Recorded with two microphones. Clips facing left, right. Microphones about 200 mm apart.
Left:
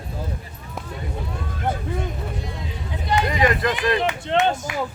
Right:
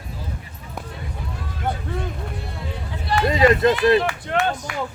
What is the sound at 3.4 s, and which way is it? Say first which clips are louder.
Speech: right 8 dB; 25° right (ahead or behind).